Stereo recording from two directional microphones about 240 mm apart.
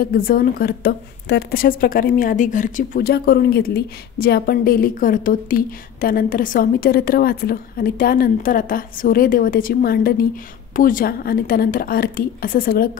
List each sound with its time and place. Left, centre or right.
0.0 s a woman's voice: left